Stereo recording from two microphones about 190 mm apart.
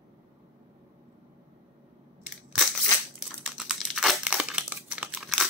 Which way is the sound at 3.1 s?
5° right (ahead or behind).